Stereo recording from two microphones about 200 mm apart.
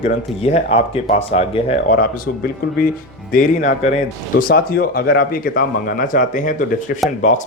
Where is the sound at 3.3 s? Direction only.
35° left (ahead or behind).